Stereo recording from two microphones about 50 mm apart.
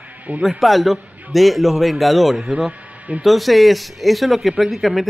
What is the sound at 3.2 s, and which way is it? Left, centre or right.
Speech, centre.